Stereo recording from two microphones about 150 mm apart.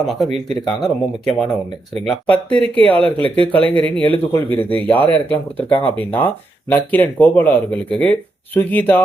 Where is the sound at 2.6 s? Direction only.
40° right (ahead or behind).